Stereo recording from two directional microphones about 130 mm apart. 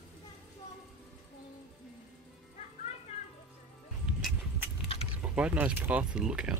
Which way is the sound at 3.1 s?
50° left (ahead or behind).